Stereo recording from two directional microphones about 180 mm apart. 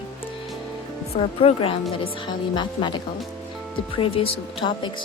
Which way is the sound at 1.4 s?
30° left (ahead or behind).